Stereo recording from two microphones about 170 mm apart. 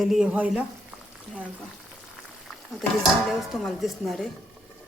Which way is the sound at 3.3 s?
Centre (ahead or behind).